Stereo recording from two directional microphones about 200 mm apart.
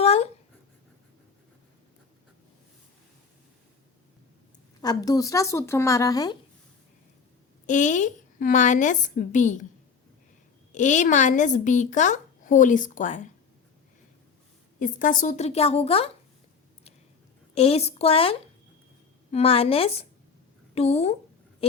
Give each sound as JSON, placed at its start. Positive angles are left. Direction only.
{"t": 0.0, "sound": "dog", "side_deg": 30}
{"t": 4.8, "sound": "speech", "side_deg": 20}
{"t": 7.7, "sound": "speech", "side_deg": 40}
{"t": 10.7, "sound": "speech", "side_deg": 35}
{"t": 14.8, "sound": "speech", "side_deg": 40}
{"t": 17.5, "sound": "a woman's voice", "side_deg": 30}